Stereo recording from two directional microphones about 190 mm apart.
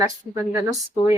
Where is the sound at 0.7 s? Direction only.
20° right (ahead or behind).